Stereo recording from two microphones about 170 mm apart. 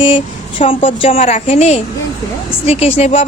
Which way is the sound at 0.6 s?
30° left (ahead or behind).